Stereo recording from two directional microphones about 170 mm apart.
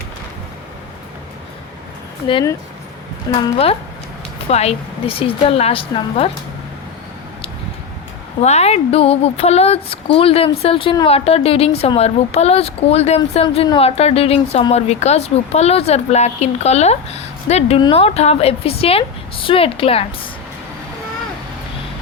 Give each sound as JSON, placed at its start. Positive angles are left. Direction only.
{"t": 3.3, "sound": "speech", "side_deg": 25}
{"t": 4.4, "sound": "speech", "side_deg": 40}
{"t": 8.4, "sound": "speech", "side_deg": 40}